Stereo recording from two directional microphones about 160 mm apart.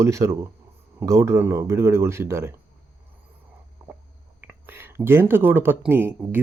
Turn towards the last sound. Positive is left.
turn(degrees=-15)  # may be behind; listen again after turning